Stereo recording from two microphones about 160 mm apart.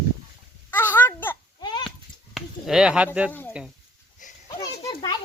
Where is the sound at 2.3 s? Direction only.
5° right (ahead or behind).